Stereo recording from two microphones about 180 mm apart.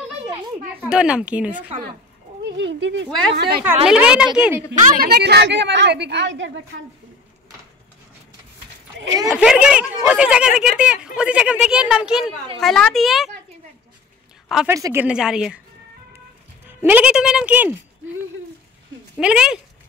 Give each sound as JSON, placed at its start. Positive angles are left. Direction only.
{"t": 0.7, "sound": "a woman's voice", "side_deg": -5}
{"t": 2.4, "sound": "a woman's voice", "side_deg": -80}
{"t": 3.8, "sound": "speech", "side_deg": -5}
{"t": 4.7, "sound": "a woman's voice", "side_deg": -75}
{"t": 5.0, "sound": "a woman's voice", "side_deg": -60}
{"t": 9.3, "sound": "speech", "side_deg": -5}
{"t": 14.7, "sound": "a woman's voice", "side_deg": -15}
{"t": 16.6, "sound": "a woman's voice", "side_deg": -10}
{"t": 19.1, "sound": "speech", "side_deg": -5}